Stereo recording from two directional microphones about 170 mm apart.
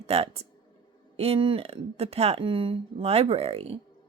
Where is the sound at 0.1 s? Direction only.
35° right (ahead or behind).